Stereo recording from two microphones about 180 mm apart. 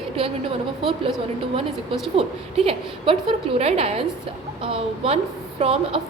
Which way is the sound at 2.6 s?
30° right (ahead or behind).